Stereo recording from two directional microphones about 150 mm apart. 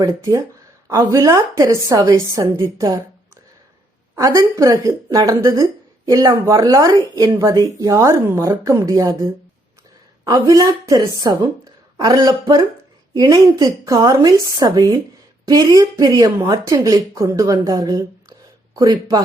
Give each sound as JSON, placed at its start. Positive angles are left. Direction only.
{"t": 0.0, "sound": "speech", "side_deg": -20}
{"t": 4.1, "sound": "speech", "side_deg": -20}
{"t": 10.2, "sound": "speech", "side_deg": -25}